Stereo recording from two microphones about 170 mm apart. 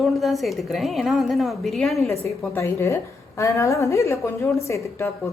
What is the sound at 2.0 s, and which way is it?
A woman's voice, 15° left (ahead or behind).